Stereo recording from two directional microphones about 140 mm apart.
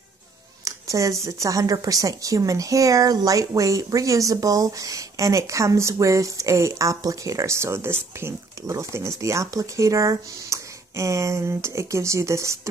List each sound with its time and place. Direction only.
0.7 s speech: 25° right (ahead or behind)